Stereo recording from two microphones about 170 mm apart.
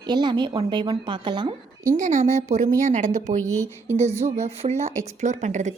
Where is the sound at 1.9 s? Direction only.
45° right (ahead or behind).